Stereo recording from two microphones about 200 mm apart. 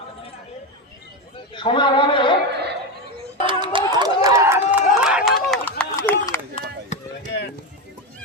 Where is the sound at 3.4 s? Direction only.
25° right (ahead or behind); by 6.1 s 5° left (ahead or behind).